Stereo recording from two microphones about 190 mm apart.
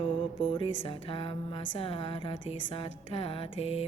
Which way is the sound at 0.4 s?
25° left (ahead or behind).